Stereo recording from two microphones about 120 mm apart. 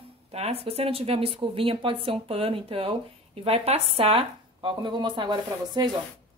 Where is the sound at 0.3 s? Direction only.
60° right (ahead or behind).